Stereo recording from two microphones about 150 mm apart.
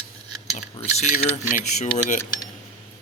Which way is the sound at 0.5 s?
50° left (ahead or behind).